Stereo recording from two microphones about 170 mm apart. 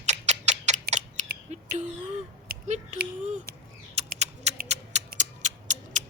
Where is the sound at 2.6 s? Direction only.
45° right (ahead or behind).